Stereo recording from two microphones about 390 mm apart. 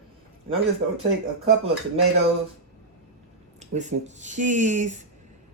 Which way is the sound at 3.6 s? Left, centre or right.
Centre.